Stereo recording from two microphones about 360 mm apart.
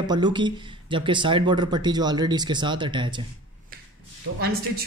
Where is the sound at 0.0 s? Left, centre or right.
Centre.